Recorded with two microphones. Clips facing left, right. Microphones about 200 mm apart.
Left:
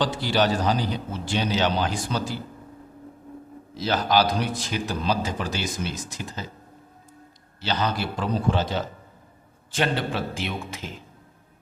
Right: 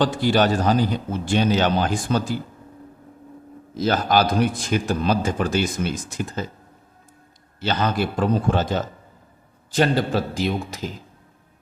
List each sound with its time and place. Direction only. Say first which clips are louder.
0.0 s a man's voice: right 4 dB; 50° right (ahead or behind)
3.8 s a man's voice: right 3 dB; 50° right (ahead or behind)
7.6 s a man's voice: right 4 dB; 50° right (ahead or behind)